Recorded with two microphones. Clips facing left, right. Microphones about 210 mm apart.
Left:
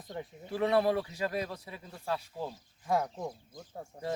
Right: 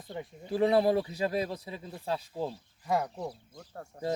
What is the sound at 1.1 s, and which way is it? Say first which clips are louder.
Speech: right 3 dB; 30° right (ahead or behind).